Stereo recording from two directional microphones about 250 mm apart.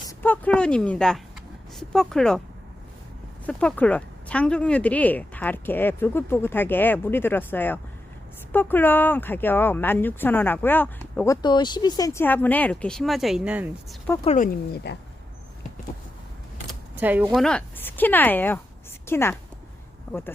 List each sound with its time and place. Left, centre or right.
0.1 s speech: centre
3.4 s speech: centre
14.3 s speech: left
17.0 s a woman's voice: centre